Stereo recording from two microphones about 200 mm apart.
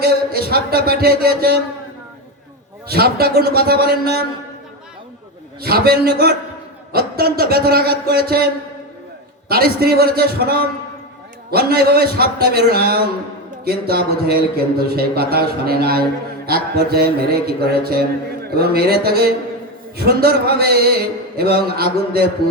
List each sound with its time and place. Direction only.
0.0 s a man's voice: 50° right (ahead or behind)
2.8 s a man's voice: 50° right (ahead or behind)
5.6 s a man's voice: 50° right (ahead or behind)
9.5 s a man's voice: 50° right (ahead or behind)